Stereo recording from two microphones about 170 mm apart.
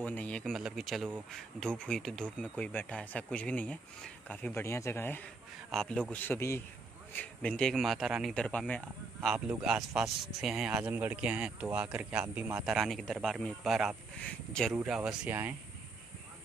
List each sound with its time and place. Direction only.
0.0 s speech: 10° left (ahead or behind)
9.3 s speech: 5° right (ahead or behind)